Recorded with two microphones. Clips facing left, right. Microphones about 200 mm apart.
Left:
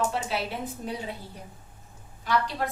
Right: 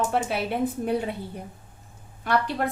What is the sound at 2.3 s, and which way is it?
Speech, 60° right (ahead or behind).